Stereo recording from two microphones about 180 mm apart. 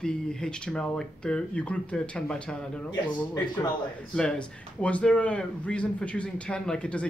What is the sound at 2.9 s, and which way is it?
Speech, 20° left (ahead or behind).